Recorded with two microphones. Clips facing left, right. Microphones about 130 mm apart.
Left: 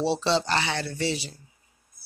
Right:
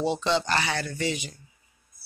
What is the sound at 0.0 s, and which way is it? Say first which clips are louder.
Speech: left 1 dB; 30° left (ahead or behind).